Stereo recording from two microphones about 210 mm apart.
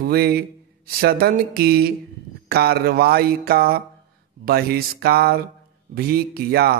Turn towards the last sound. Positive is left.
turn(degrees=-50)  # may be behind; listen again after turning